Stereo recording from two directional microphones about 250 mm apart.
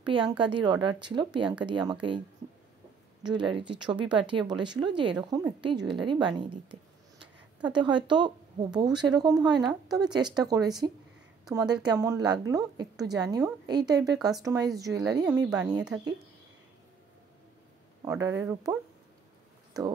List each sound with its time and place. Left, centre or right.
0.0 s a woman's voice: centre
3.3 s a woman's voice: centre
18.0 s a woman's voice: centre